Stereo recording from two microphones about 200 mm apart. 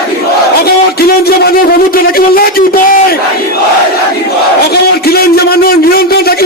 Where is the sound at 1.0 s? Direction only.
50° left (ahead or behind).